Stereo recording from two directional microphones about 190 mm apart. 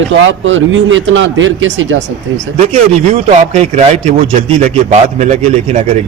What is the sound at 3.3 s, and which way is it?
A man's voice, 35° right (ahead or behind).